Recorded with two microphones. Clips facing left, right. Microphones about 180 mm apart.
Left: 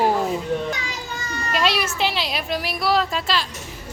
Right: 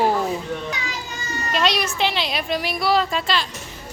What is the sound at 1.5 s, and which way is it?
A child's voice, 5° left (ahead or behind).